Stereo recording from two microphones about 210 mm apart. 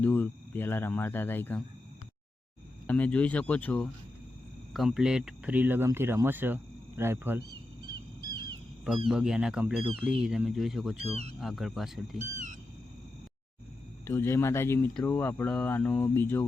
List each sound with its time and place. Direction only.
0.0 s speech: 10° left (ahead or behind)
2.8 s speech: 5° left (ahead or behind); by 7.4 s 10° right (ahead or behind)
7.9 s bird: 20° right (ahead or behind)
9.0 s speech: 5° right (ahead or behind)
14.1 s speech: 10° left (ahead or behind)